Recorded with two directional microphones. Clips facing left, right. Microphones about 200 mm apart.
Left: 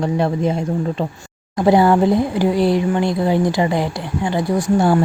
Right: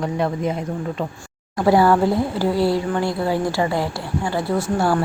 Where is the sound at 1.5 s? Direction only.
20° left (ahead or behind).